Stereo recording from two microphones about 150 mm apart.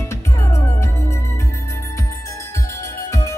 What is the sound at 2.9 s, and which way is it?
Music, 20° left (ahead or behind).